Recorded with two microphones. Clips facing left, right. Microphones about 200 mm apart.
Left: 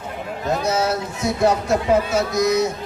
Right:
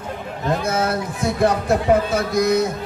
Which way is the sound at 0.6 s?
55° right (ahead or behind).